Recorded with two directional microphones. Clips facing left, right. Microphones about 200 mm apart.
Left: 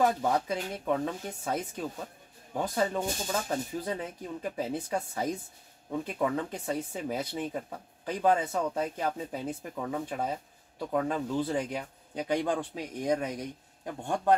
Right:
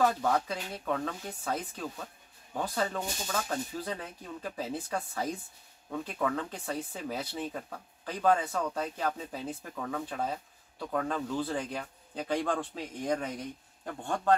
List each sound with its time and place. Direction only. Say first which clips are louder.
0.0 s speech: left 1 dB; 15° left (ahead or behind)